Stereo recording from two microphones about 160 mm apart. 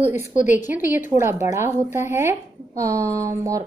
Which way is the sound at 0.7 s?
15° right (ahead or behind).